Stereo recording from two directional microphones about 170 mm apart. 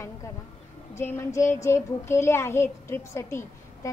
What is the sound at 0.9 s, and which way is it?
A child's voice, 15° left (ahead or behind).